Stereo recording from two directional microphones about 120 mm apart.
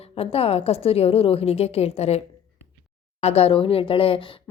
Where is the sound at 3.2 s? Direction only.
55° left (ahead or behind).